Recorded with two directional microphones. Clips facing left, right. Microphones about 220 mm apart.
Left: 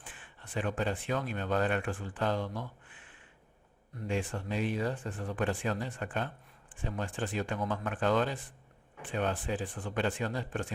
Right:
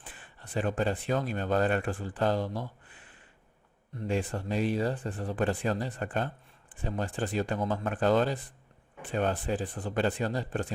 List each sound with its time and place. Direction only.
0.1 s speech: 35° right (ahead or behind)